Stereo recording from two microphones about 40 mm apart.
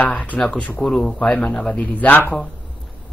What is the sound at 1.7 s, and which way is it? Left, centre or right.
Speech, left.